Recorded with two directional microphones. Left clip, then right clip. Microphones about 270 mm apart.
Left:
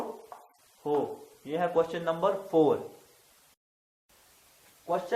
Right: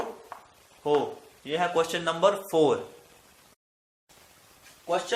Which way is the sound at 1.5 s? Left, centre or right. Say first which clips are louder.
Right 2 dB; right.